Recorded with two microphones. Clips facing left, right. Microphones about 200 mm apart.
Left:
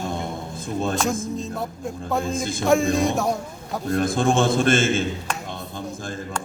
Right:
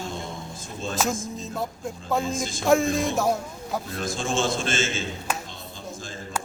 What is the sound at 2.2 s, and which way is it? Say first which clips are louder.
Speech: left 3 dB; 55° left (ahead or behind).